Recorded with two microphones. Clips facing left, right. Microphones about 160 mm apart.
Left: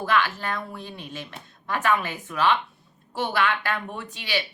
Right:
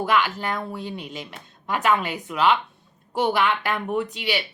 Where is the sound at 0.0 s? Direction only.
15° right (ahead or behind).